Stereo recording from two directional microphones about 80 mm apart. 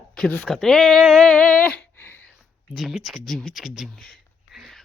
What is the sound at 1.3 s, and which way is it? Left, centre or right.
Speech, centre.